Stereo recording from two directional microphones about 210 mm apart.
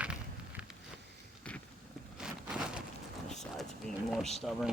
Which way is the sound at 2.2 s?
5° right (ahead or behind).